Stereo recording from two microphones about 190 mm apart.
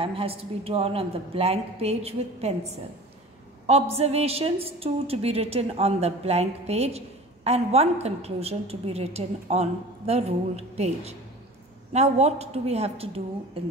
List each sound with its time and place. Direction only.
0.0 s a woman's voice: 30° right (ahead or behind)
3.9 s a woman's voice: 35° right (ahead or behind)